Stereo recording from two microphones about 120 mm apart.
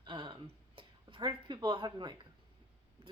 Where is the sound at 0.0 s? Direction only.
40° right (ahead or behind).